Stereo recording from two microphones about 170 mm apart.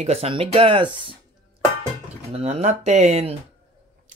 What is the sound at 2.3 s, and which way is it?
Speech, 35° right (ahead or behind).